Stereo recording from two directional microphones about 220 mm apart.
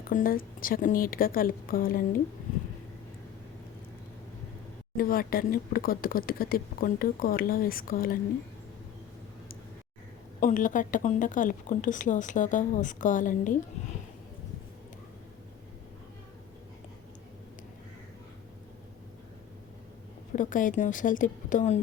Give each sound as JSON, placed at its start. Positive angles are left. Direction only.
{"t": 0.1, "sound": "speech", "side_deg": 40}
{"t": 4.9, "sound": "speech", "side_deg": 40}
{"t": 10.4, "sound": "speech", "side_deg": 35}
{"t": 20.3, "sound": "speech", "side_deg": 35}